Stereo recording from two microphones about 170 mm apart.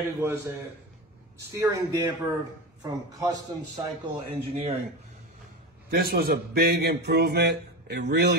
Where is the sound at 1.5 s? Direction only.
15° right (ahead or behind).